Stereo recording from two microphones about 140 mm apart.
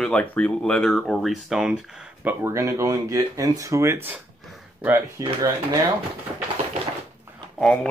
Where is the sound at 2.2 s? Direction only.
15° right (ahead or behind).